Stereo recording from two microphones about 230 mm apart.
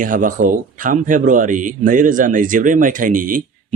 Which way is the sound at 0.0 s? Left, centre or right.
Right.